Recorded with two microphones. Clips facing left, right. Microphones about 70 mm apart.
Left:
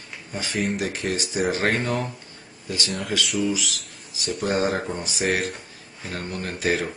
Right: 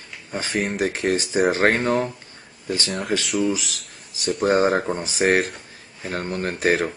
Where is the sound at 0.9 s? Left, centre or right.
Right.